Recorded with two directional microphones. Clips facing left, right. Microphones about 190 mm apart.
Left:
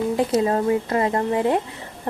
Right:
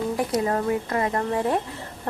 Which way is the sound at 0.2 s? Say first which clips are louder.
Left 5 dB; 25° left (ahead or behind).